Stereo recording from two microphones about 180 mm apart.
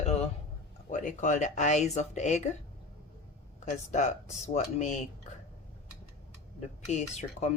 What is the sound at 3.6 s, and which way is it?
Speech, 40° left (ahead or behind).